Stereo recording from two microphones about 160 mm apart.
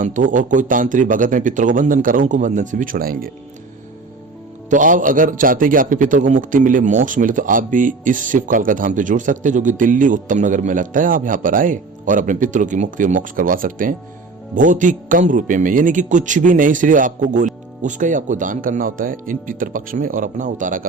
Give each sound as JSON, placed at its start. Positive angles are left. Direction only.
{"t": 0.0, "sound": "a man's voice", "side_deg": -55}
{"t": 4.7, "sound": "a man's voice", "side_deg": -55}